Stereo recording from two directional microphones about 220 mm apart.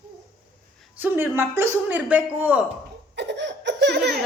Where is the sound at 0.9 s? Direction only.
10° right (ahead or behind).